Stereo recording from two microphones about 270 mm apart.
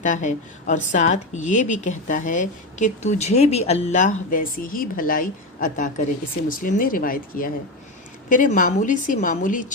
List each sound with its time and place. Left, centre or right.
0.0 s speech: left